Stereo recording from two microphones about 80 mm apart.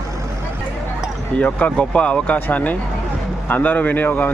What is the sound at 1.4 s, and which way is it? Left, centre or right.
A man's voice, centre.